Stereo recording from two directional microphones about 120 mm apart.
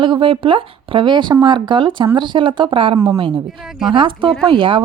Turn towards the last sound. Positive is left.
turn(degrees=-45)  # may be behind; listen again after turning